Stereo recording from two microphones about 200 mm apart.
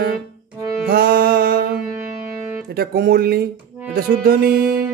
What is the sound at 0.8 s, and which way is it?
Music, 50° right (ahead or behind).